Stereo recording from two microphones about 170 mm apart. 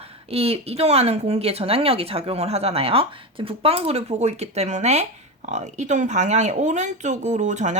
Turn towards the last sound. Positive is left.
turn(degrees=-45)  # may be behind; listen again after turning